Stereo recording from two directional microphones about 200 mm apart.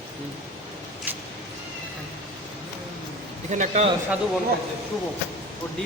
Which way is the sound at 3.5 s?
35° right (ahead or behind).